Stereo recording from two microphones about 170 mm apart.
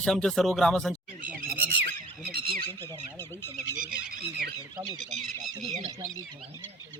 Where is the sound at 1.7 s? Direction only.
75° right (ahead or behind).